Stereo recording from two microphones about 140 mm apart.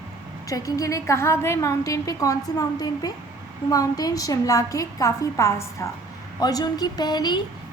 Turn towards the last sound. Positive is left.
turn(degrees=30)  # may be behind; listen again after turning